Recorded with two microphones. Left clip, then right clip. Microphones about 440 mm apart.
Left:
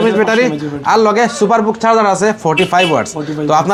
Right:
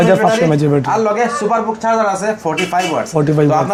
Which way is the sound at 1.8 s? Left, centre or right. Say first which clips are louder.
Left 4 dB; left.